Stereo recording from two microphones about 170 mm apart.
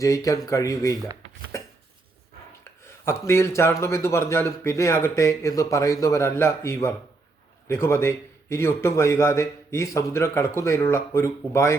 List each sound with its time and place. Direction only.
0.0 s speech: 20° left (ahead or behind)
1.5 s a sound: 15° left (ahead or behind)
2.8 s a man's voice: 15° left (ahead or behind)